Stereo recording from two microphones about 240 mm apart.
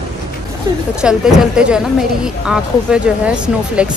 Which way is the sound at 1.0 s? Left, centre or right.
Centre.